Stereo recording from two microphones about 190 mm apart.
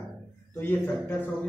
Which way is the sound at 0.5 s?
10° left (ahead or behind).